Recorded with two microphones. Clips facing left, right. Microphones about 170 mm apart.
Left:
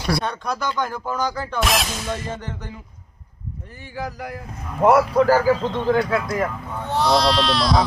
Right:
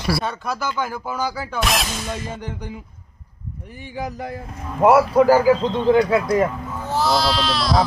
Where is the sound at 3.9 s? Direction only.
20° right (ahead or behind).